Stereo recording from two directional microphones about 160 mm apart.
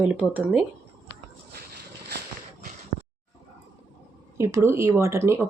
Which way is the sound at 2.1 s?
90° right.